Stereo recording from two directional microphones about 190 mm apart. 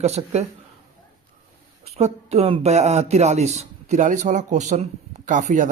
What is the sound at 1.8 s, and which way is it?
Speech, 35° right (ahead or behind).